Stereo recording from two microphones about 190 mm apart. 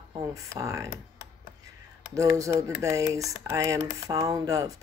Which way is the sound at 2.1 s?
15° right (ahead or behind).